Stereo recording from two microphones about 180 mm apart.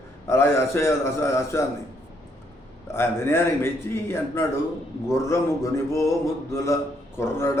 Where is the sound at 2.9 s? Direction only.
15° left (ahead or behind).